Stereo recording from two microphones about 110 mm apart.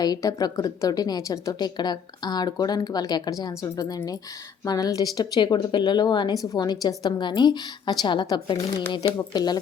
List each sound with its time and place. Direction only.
0.0 s a woman's voice: 35° left (ahead or behind)